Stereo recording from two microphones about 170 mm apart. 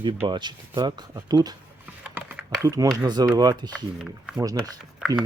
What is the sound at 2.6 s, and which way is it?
Speech, 20° right (ahead or behind).